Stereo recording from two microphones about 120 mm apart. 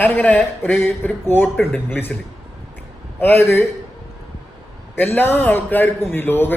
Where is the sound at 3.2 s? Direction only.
20° left (ahead or behind).